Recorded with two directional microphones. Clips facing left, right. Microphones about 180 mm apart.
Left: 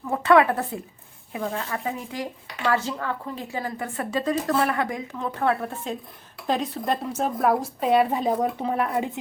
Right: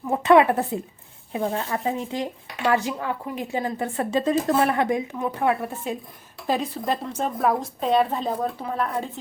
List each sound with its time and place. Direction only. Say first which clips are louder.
0.1 s a woman's voice: right 2 dB; 20° right (ahead or behind); by 9.0 s 15° left (ahead or behind)